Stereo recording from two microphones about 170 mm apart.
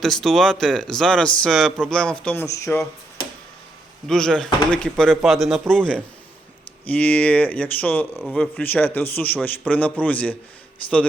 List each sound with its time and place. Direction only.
0.0 s a man's voice: centre (ahead or behind)
4.0 s a man's voice: 5° left (ahead or behind)
8.1 s speech: 5° right (ahead or behind)
8.4 s a man's voice: 10° left (ahead or behind)